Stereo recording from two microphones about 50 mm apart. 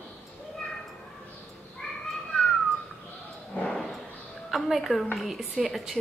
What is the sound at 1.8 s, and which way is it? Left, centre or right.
Crow, centre.